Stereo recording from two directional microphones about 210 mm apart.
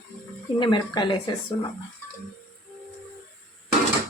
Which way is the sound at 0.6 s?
20° left (ahead or behind).